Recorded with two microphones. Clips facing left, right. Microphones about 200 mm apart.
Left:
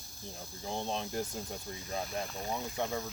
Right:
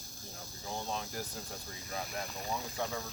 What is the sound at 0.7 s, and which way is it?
Speech, 25° left (ahead or behind).